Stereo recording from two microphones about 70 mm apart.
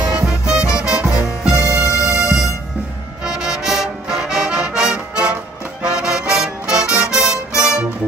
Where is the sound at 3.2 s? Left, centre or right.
Centre.